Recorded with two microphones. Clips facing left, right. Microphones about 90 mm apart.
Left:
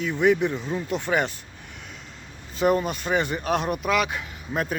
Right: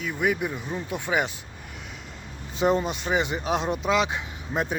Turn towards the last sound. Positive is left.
turn(degrees=-25)  # may be behind; listen again after turning